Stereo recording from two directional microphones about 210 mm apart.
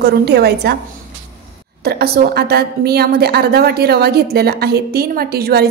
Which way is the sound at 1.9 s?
50° right (ahead or behind).